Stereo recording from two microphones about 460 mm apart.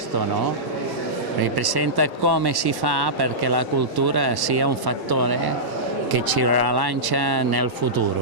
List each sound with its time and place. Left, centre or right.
1.4 s speech: right